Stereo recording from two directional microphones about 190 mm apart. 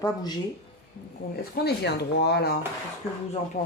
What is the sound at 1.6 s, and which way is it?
Speech, 60° left (ahead or behind).